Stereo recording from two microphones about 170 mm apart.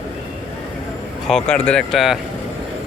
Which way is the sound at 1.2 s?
5° left (ahead or behind).